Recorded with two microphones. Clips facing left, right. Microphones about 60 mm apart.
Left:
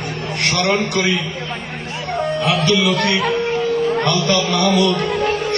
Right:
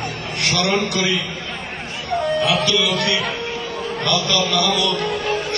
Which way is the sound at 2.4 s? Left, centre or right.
Left.